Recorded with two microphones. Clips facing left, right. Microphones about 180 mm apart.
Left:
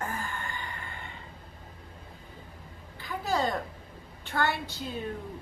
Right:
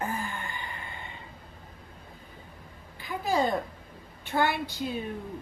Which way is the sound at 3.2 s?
15° right (ahead or behind).